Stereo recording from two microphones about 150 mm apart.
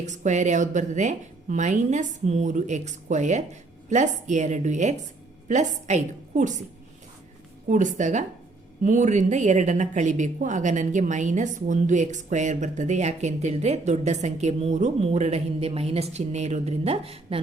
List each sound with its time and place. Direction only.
0.0 s a woman's voice: 50° right (ahead or behind)
7.7 s a woman's voice: 55° right (ahead or behind); by 17.4 s 40° right (ahead or behind)